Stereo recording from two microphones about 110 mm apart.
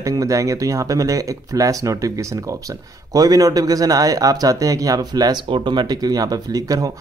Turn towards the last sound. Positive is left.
turn(degrees=-35)  # may be behind; listen again after turning